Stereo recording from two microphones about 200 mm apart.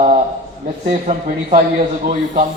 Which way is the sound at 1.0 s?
35° right (ahead or behind).